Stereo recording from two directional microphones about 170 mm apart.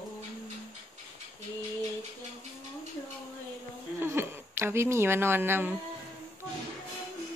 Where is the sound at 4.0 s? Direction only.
15° right (ahead or behind).